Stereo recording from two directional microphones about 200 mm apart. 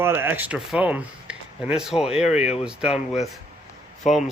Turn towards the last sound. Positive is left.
turn(degrees=35)  # may be behind; listen again after turning